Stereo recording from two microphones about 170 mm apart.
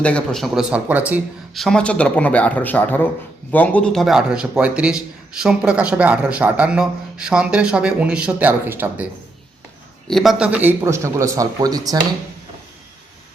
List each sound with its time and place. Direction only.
0.0 s a man's voice: 5° left (ahead or behind); by 1.2 s 10° right (ahead or behind)
1.5 s a man's voice: 5° left (ahead or behind); by 9.0 s 10° right (ahead or behind)
10.1 s a man's voice: centre (ahead or behind); by 11.9 s 20° right (ahead or behind)